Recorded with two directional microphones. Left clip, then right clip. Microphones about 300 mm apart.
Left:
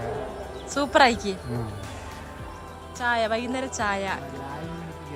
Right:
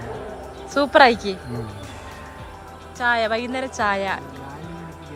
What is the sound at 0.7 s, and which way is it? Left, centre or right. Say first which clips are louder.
Speech: right 5 dB; centre.